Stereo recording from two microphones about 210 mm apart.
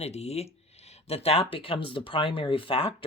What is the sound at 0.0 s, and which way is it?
Speech, 30° left (ahead or behind).